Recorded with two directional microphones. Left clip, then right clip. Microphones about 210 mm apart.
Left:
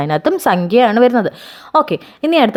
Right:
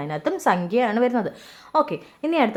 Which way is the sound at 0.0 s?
40° left (ahead or behind).